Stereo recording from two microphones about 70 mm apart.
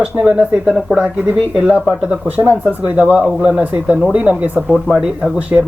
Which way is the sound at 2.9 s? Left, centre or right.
Right.